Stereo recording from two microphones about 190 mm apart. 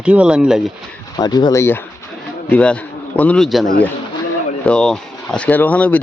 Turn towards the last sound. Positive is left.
turn(degrees=10)  # may be behind; listen again after turning